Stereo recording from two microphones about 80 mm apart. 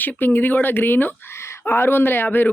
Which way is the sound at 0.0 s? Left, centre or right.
Left.